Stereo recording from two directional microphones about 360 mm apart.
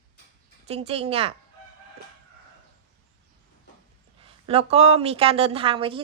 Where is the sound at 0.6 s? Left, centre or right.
Centre.